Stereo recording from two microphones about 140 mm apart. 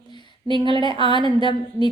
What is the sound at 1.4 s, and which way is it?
Speech, 35° left (ahead or behind).